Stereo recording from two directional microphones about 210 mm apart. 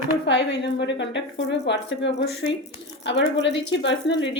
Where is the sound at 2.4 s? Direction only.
30° left (ahead or behind).